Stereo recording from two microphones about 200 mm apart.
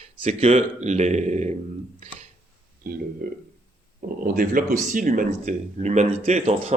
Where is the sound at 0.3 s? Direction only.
35° right (ahead or behind).